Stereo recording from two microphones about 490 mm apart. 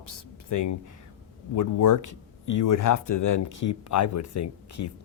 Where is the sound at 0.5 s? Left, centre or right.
Left.